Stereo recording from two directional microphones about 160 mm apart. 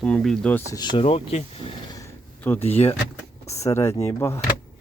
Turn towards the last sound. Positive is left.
turn(degrees=15)  # may be behind; listen again after turning